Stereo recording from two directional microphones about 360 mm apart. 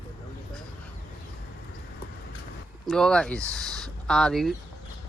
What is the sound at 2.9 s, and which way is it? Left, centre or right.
Speech, centre.